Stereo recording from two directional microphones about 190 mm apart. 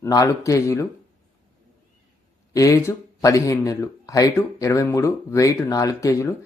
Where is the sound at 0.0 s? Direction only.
15° left (ahead or behind).